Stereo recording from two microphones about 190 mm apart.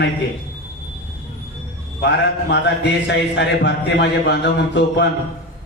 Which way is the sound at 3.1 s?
60° left (ahead or behind).